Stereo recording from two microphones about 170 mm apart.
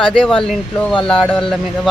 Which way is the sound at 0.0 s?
Centre (ahead or behind).